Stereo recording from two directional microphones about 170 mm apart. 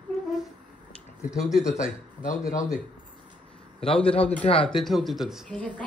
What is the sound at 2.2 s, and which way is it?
Speech, 45° left (ahead or behind).